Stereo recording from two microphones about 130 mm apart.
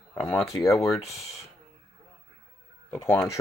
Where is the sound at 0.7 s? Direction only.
Centre (ahead or behind).